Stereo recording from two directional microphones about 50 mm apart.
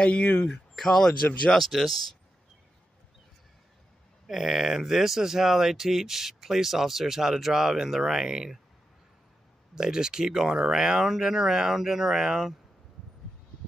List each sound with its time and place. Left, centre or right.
0.0 s speech: left
1.5 s speech: centre
4.3 s speech: centre
9.8 s speech: centre